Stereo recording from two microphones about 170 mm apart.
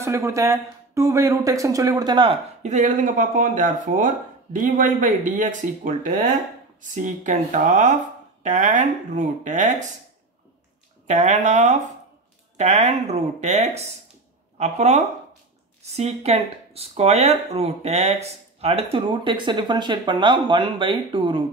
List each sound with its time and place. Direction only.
0.0 s speech: 20° right (ahead or behind)
2.6 s speech: 45° right (ahead or behind)
11.1 s speech: 45° right (ahead or behind)